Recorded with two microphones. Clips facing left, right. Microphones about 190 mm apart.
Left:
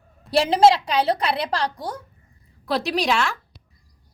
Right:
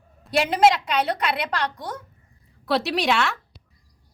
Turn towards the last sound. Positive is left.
turn(degrees=0)  # may be behind; listen again after turning